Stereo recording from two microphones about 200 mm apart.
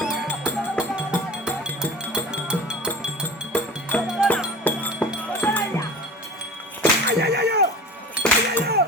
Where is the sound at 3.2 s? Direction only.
10° left (ahead or behind).